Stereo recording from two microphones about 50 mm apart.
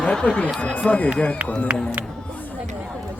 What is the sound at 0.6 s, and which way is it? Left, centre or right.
Speech, left.